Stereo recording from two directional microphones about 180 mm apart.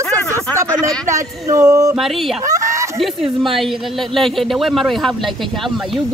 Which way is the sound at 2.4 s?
15° right (ahead or behind).